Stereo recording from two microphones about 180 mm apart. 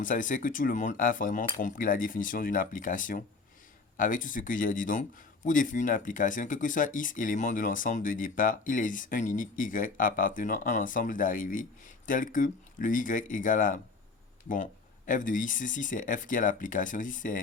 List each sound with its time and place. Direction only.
0.0 s speech: 45° left (ahead or behind)